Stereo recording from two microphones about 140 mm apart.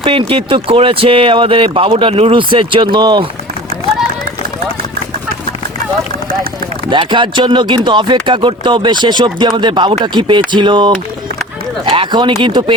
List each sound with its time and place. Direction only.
0.0 s speech: 40° right (ahead or behind)
6.9 s speech: 35° right (ahead or behind)